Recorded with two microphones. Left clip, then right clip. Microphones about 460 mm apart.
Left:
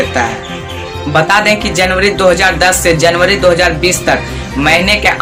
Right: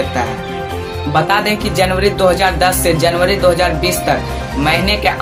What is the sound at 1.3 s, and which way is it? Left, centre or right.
Speech, right.